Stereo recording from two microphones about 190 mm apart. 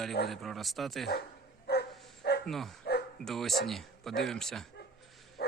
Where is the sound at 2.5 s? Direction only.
Centre (ahead or behind).